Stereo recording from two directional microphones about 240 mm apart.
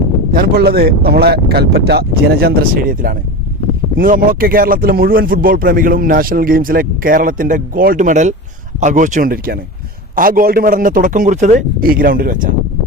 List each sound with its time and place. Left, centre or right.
0.3 s a man's voice: right